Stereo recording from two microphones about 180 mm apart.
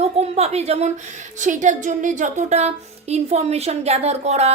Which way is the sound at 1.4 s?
45° right (ahead or behind).